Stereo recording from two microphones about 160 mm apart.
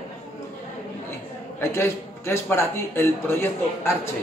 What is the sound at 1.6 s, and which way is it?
A man's voice, 15° left (ahead or behind).